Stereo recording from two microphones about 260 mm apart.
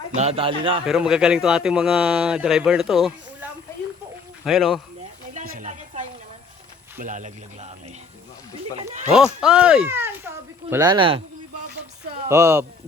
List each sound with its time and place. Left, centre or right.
0.1 s speech: right
0.9 s speech: centre
4.4 s speech: centre
5.3 s a sound: right
7.0 s speech: right
8.9 s speech: right
9.1 s speech: centre
12.3 s speech: centre